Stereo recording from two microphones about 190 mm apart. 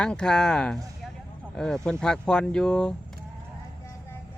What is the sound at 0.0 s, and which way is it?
Speech, 5° left (ahead or behind).